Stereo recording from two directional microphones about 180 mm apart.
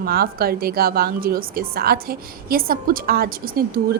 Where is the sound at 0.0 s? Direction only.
55° right (ahead or behind).